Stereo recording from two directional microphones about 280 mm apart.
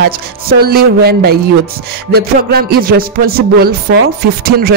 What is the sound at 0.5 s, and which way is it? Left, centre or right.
Music, right.